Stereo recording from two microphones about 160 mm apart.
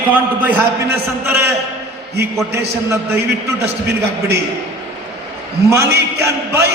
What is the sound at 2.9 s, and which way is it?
Speech, 15° right (ahead or behind).